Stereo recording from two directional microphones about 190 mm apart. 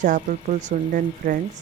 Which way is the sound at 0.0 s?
40° right (ahead or behind).